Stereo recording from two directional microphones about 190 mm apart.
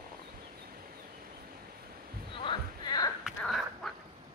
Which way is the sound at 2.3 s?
25° left (ahead or behind).